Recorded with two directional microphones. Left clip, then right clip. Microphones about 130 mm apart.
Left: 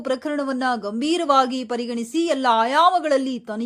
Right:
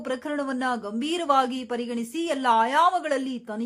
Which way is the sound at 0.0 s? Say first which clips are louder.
Left 5 dB; 25° left (ahead or behind).